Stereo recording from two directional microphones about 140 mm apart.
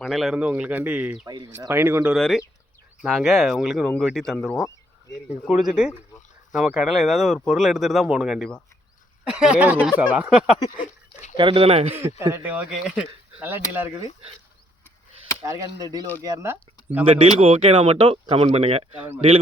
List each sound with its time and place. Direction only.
0.0 s speech: centre (ahead or behind); by 2.1 s 15° right (ahead or behind)
2.1 s speech: 5° left (ahead or behind)
10.7 s a sound: 65° left (ahead or behind)
11.3 s speech: 40° right (ahead or behind)
12.2 s speech: 15° right (ahead or behind)
15.4 s speech: 25° right (ahead or behind)
17.3 s speech: 45° right (ahead or behind)